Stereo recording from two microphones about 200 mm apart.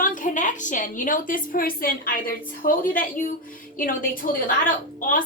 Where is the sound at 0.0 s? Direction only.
40° left (ahead or behind).